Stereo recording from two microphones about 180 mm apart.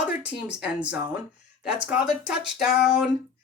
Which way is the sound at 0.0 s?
5° right (ahead or behind).